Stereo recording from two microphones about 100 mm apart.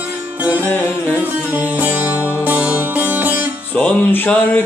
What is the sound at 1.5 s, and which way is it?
Music, 15° right (ahead or behind).